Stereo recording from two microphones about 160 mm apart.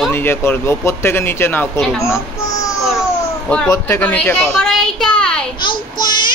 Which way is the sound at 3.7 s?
15° left (ahead or behind).